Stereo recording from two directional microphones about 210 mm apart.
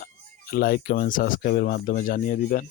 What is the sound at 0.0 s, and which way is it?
Speech, 45° left (ahead or behind).